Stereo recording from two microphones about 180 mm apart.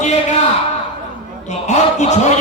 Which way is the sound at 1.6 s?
40° left (ahead or behind).